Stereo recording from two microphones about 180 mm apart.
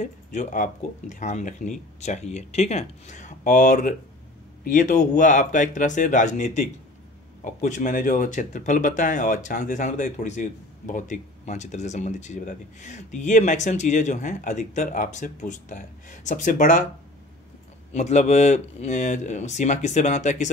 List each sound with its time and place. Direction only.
0.0 s speech: 40° left (ahead or behind)
17.9 s speech: 40° left (ahead or behind)